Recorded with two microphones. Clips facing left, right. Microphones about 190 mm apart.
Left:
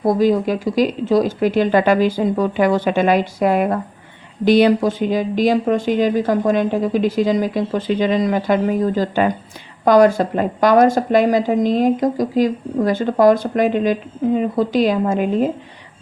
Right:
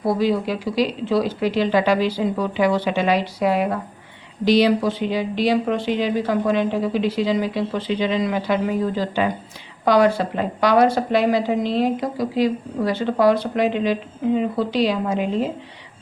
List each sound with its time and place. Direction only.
0.0 s a woman's voice: 45° left (ahead or behind)